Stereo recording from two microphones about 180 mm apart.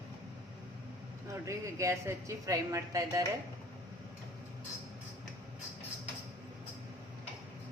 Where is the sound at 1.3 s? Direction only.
15° right (ahead or behind).